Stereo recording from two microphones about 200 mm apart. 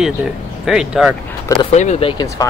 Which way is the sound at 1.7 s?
35° left (ahead or behind).